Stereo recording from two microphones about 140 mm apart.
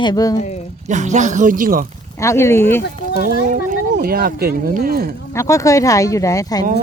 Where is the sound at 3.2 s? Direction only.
65° right (ahead or behind); by 5.1 s 90° right.